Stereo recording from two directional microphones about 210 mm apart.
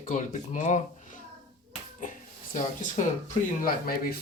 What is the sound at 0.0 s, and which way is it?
Speech, 35° left (ahead or behind).